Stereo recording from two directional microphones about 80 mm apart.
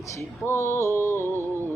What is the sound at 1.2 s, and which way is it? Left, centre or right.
Music, right.